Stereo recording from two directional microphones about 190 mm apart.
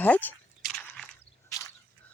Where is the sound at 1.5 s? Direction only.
20° left (ahead or behind).